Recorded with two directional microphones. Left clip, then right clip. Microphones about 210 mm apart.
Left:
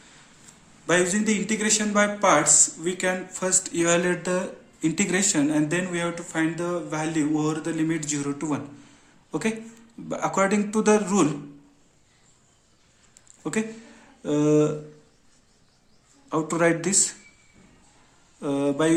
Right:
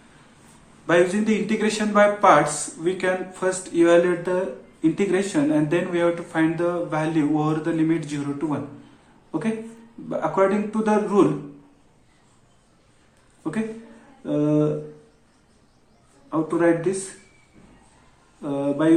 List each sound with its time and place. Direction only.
0.9 s speech: 35° left (ahead or behind)
10.1 s speech: 50° left (ahead or behind)
13.4 s a woman's voice: 50° left (ahead or behind)
16.3 s a man's voice: 55° left (ahead or behind)
18.4 s speech: 55° left (ahead or behind)